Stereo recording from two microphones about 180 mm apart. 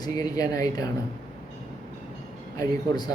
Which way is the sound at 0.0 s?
20° left (ahead or behind).